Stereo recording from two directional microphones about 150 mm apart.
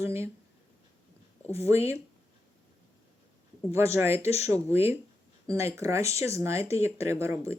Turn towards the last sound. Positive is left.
turn(degrees=-20)  # may be behind; listen again after turning